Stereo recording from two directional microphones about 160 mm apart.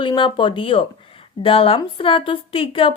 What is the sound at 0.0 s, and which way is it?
A woman's voice, 30° left (ahead or behind).